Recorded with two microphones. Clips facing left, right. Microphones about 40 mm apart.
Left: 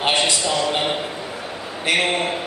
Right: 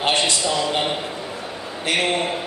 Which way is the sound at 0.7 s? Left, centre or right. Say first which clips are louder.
Left 1 dB; centre.